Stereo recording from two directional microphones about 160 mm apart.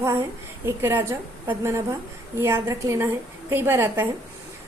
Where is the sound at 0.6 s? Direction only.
15° right (ahead or behind).